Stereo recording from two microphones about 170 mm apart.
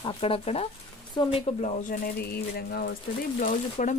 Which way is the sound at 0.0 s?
35° left (ahead or behind).